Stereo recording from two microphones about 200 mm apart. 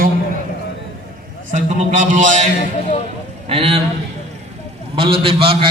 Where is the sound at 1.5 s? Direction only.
40° right (ahead or behind).